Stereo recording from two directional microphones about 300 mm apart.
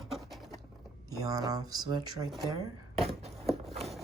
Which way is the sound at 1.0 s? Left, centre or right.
Centre.